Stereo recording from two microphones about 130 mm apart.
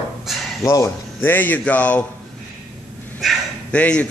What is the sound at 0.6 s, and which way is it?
A man's voice, 20° left (ahead or behind).